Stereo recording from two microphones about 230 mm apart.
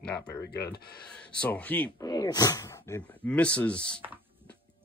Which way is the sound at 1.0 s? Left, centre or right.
Centre.